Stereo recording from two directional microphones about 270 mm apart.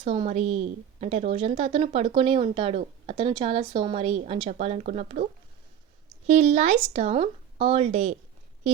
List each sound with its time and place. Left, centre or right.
0.0 s speech: centre
6.2 s speech: right